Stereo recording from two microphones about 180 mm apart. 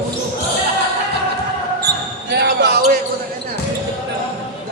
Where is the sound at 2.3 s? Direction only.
65° right (ahead or behind).